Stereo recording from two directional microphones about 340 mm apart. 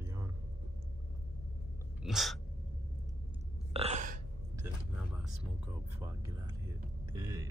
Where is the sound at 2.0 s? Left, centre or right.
Centre.